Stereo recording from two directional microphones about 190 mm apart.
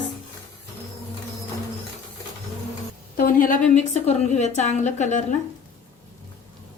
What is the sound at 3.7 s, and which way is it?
A woman's voice, 35° left (ahead or behind).